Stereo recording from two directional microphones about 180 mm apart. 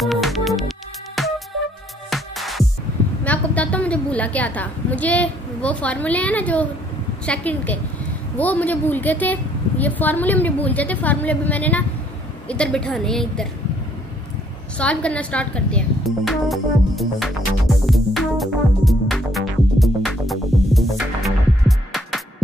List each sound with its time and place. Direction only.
0.0 s music: centre (ahead or behind)
3.3 s a woman's voice: 10° left (ahead or behind)
14.8 s a woman's voice: 5° left (ahead or behind)
16.3 s music: centre (ahead or behind)